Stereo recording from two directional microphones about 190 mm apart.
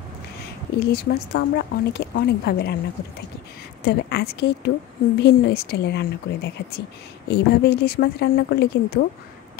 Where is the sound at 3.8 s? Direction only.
60° left (ahead or behind).